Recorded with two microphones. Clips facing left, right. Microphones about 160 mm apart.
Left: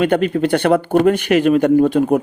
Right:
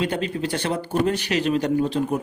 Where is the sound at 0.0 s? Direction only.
60° left (ahead or behind).